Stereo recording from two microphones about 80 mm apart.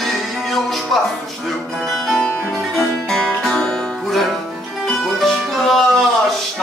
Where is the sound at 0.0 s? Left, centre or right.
Centre.